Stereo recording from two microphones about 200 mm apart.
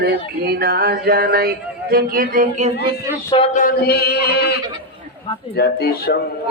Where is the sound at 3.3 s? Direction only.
30° left (ahead or behind).